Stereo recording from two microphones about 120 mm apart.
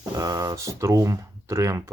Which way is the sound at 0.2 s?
30° right (ahead or behind).